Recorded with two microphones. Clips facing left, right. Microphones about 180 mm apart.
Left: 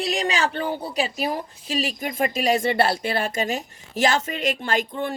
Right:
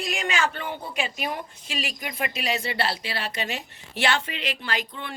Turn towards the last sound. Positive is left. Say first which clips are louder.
# left 7 dB
turn(degrees=45)  # may be behind; listen again after turning